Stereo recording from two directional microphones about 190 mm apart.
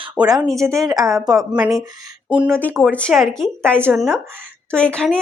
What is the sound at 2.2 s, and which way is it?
Speech, 5° right (ahead or behind).